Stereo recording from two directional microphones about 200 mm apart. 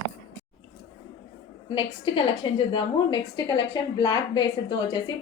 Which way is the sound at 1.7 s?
25° left (ahead or behind).